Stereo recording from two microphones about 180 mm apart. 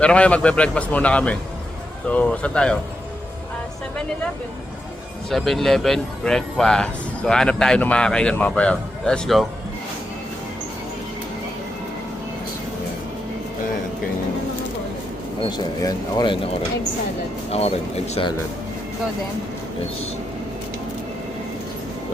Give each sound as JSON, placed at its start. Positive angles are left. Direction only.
{"t": 0.0, "sound": "a man's voice", "side_deg": 5}
{"t": 5.3, "sound": "speech", "side_deg": 0}
{"t": 15.4, "sound": "speech", "side_deg": 20}
{"t": 17.5, "sound": "speech", "side_deg": 35}